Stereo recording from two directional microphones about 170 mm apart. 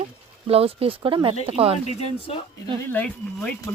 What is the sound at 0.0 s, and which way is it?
Speech, 35° right (ahead or behind).